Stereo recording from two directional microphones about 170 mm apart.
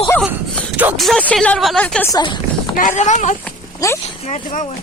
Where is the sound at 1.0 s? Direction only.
Centre (ahead or behind).